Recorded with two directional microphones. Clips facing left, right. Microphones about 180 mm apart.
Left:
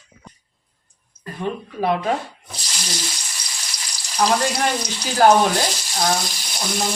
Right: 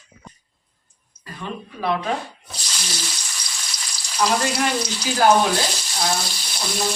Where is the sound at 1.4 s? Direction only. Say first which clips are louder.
Left 6 dB; 55° left (ahead or behind).